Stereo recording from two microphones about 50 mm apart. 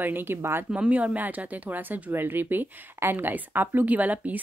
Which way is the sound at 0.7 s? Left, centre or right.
Right.